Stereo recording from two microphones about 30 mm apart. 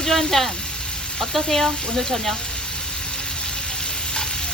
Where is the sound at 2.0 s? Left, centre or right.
Centre.